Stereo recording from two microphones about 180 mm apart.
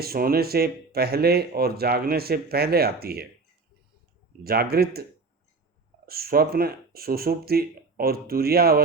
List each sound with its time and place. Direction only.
0.0 s speech: 55° right (ahead or behind)
4.4 s speech: 60° right (ahead or behind)
6.1 s speech: 60° right (ahead or behind)